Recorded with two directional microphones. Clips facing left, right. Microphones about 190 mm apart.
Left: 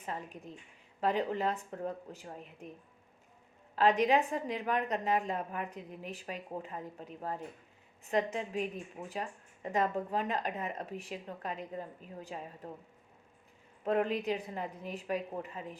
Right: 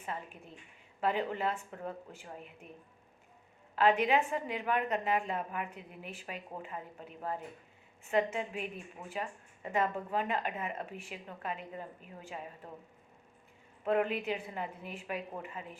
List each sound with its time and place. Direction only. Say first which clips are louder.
0.0 s a woman's voice: left 1 dB; 40° left (ahead or behind)
3.8 s a woman's voice: left 1 dB; 40° left (ahead or behind)
13.8 s a woman's voice: even; 40° left (ahead or behind)